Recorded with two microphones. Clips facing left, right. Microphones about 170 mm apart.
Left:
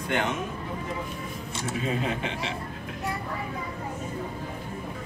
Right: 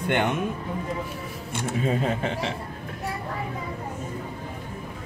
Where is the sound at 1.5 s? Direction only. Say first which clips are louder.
Right 4 dB; 50° right (ahead or behind).